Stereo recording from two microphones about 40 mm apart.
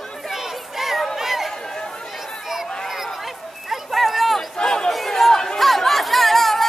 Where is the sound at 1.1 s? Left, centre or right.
Centre.